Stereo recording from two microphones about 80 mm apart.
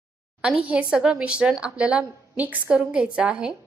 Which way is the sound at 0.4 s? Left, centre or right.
Centre.